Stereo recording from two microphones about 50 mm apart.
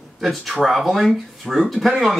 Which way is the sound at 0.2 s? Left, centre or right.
Centre.